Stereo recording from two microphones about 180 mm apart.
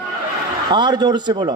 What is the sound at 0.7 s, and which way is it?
Speech, 25° right (ahead or behind).